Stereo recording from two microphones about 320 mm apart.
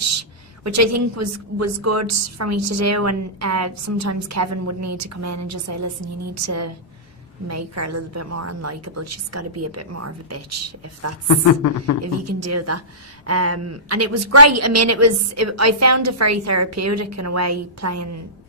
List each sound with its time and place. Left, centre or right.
0.7 s a woman's voice: right
11.2 s a woman's voice: left
12.0 s a woman's voice: right